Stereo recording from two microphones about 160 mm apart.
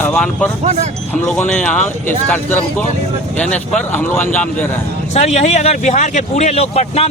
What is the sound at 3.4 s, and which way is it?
Speech, 5° left (ahead or behind).